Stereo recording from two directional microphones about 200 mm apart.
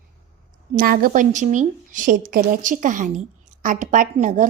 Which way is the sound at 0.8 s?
45° right (ahead or behind).